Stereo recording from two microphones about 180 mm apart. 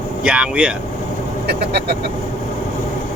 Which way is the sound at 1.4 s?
65° right (ahead or behind).